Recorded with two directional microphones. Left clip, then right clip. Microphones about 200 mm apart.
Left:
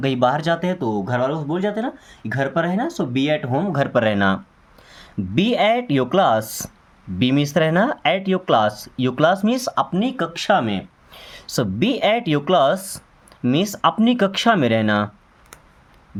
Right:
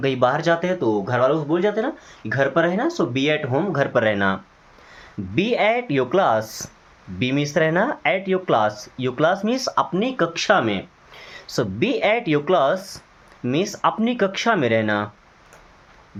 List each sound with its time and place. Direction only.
0.0 s speech: 45° left (ahead or behind)